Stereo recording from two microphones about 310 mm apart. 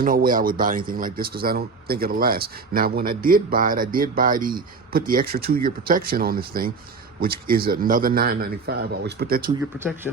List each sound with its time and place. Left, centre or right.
0.0 s speech: right
9.6 s speech: centre